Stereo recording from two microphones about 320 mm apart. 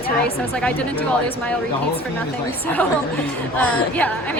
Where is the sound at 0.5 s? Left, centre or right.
Centre.